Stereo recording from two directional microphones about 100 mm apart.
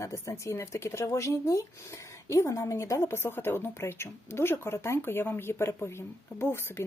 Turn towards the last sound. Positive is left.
turn(degrees=25)  # may be behind; listen again after turning